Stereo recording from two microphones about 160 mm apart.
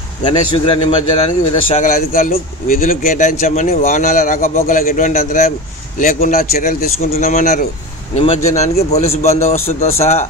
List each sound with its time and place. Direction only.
0.2 s a man's voice: 30° left (ahead or behind)